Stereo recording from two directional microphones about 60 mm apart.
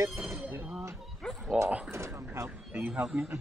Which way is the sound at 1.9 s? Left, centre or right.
Right.